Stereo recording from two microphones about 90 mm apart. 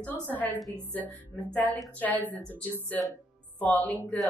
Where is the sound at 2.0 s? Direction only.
20° left (ahead or behind).